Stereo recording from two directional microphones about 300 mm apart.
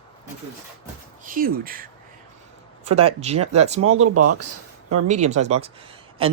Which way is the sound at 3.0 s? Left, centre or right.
Right.